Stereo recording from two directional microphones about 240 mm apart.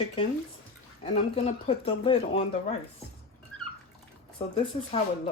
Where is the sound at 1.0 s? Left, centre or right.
Left.